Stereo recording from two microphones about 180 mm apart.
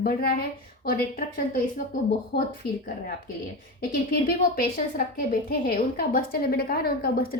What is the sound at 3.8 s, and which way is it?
A woman's voice, 55° left (ahead or behind).